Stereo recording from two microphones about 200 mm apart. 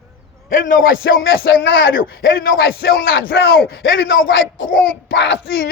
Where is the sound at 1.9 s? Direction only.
50° left (ahead or behind).